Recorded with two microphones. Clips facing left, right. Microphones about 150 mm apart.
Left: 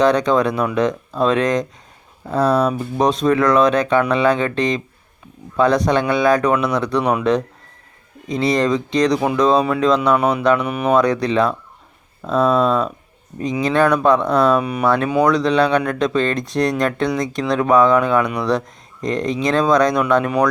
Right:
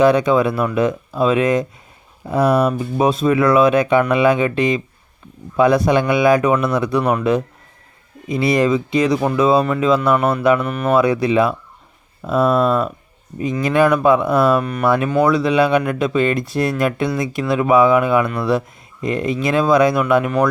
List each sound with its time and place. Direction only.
0.0 s speech: 10° right (ahead or behind)
10.2 s speech: 10° left (ahead or behind)
10.9 s speech: 5° right (ahead or behind)
14.6 s speech: 10° left (ahead or behind)
14.8 s speech: 10° right (ahead or behind)